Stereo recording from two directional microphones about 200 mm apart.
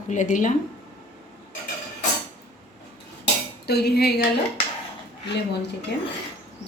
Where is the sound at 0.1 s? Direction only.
40° left (ahead or behind).